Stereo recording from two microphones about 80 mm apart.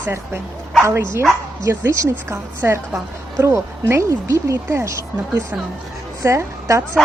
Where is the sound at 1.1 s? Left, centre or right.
Right.